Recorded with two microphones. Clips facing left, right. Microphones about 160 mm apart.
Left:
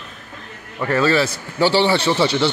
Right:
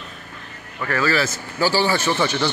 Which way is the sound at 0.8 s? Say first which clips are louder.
Left 4 dB; 25° left (ahead or behind).